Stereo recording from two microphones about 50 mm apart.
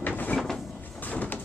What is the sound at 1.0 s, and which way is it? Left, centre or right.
Sliding door, left.